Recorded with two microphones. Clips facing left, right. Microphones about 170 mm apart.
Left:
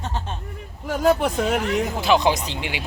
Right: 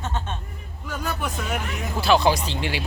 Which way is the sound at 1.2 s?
65° left (ahead or behind).